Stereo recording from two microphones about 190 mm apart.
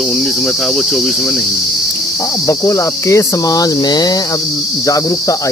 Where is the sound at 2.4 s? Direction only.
15° left (ahead or behind).